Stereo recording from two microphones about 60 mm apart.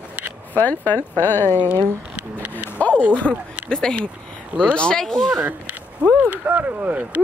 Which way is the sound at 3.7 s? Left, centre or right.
Centre.